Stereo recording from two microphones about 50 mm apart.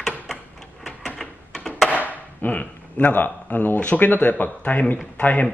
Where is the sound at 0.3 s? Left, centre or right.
Centre.